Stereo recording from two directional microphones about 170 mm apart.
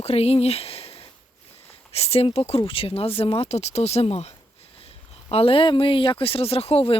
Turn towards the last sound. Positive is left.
turn(degrees=35)  # may be behind; listen again after turning